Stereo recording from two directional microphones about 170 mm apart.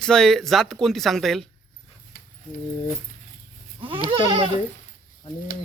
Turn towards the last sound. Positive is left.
turn(degrees=-30)  # may be behind; listen again after turning